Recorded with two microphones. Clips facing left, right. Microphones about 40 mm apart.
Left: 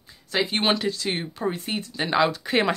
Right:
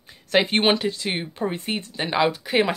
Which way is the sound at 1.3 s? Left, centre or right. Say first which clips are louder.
Right 1 dB; right.